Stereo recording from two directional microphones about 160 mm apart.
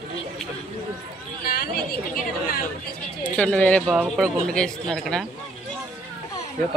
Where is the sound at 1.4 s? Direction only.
65° left (ahead or behind).